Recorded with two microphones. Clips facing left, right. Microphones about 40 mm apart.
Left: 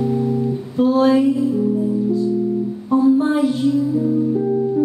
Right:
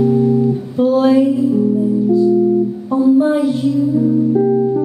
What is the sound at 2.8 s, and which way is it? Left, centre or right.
Music, centre.